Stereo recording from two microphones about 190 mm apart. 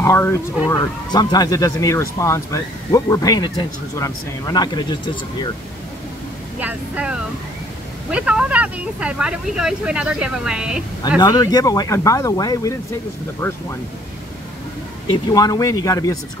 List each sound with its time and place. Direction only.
0.0 s speech: 15° left (ahead or behind)
6.6 s speech: 5° right (ahead or behind)
11.1 s speech: 20° left (ahead or behind)
15.3 s speech: 20° left (ahead or behind)